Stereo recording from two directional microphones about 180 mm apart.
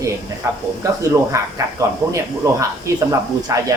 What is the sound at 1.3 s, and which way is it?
Speech, 15° right (ahead or behind).